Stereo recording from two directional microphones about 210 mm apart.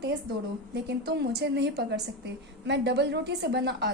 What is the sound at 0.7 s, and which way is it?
A woman's voice, 50° right (ahead or behind).